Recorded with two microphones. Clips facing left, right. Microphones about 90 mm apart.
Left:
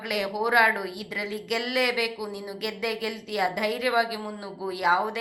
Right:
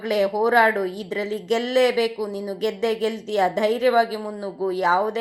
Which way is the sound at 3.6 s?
25° right (ahead or behind).